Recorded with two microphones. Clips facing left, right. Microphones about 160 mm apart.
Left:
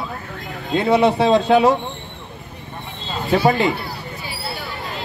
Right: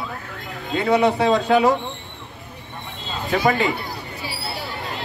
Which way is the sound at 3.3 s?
35° left (ahead or behind).